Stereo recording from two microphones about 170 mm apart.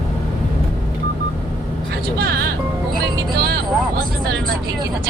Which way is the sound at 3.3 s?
70° right (ahead or behind).